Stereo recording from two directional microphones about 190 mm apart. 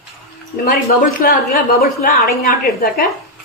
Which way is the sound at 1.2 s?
50° left (ahead or behind).